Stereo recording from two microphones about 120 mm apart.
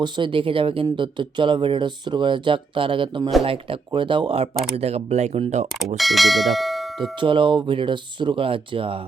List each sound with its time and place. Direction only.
0.0 s speech: 45° right (ahead or behind); by 6.0 s 70° right (ahead or behind)
6.0 s bell: centre (ahead or behind)
7.2 s speech: 45° right (ahead or behind)